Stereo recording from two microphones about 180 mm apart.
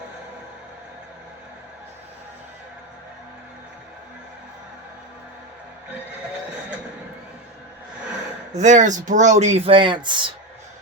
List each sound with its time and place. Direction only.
8.5 s speech: 45° right (ahead or behind); by 10.2 s 25° right (ahead or behind)